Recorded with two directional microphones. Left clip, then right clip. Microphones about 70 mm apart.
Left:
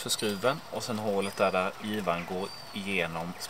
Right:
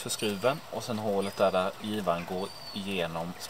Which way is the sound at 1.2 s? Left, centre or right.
Left.